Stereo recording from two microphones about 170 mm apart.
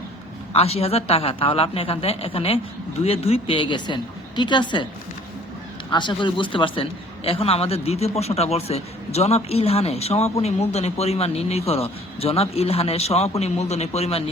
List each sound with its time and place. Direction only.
0.5 s a man's voice: 35° left (ahead or behind)
5.9 s a man's voice: 25° left (ahead or behind)